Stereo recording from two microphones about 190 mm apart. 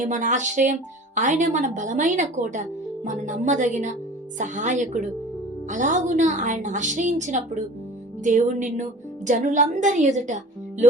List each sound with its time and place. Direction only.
0.0 s speech: 40° right (ahead or behind)